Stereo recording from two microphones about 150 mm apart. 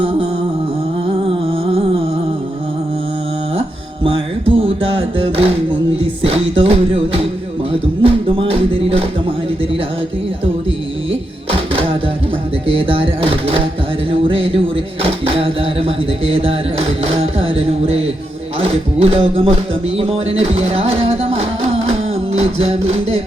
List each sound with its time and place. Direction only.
1.3 s music: 40° right (ahead or behind)
4.0 s music: 35° right (ahead or behind)
11.1 s music: 40° right (ahead or behind)
14.1 s a sound: 35° right (ahead or behind)
18.6 s music: 40° right (ahead or behind)